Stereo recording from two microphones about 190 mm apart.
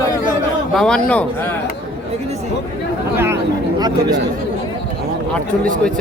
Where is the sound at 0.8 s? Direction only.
5° left (ahead or behind).